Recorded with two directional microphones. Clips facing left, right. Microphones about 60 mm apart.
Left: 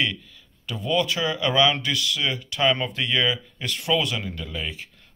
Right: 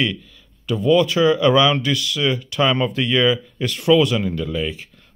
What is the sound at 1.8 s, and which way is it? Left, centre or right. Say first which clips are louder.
Speech: right 4 dB; centre.